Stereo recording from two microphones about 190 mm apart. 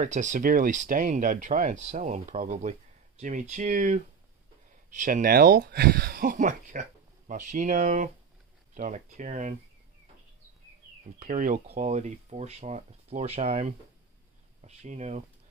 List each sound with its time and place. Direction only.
0.0 s speech: 40° right (ahead or behind)
11.1 s speech: 40° right (ahead or behind)